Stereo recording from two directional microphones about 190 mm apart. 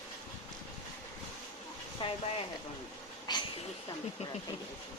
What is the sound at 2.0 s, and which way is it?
Speech, 25° left (ahead or behind).